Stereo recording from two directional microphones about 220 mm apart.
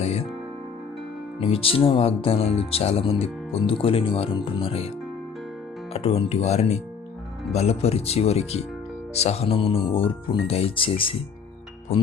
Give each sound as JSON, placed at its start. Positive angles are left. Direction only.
{"t": 0.0, "sound": "music", "side_deg": 30}
{"t": 1.4, "sound": "speech", "side_deg": 25}
{"t": 5.9, "sound": "speech", "side_deg": 25}